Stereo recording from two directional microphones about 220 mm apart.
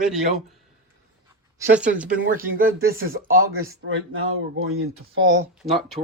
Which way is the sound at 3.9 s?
65° right (ahead or behind).